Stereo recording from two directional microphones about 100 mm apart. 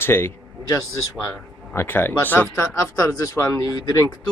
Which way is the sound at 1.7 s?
25° left (ahead or behind).